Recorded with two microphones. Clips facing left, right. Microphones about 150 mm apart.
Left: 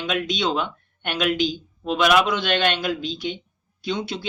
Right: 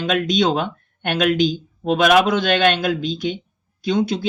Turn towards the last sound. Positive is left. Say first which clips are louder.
# right 8 dB
turn(degrees=-45)  # may be behind; listen again after turning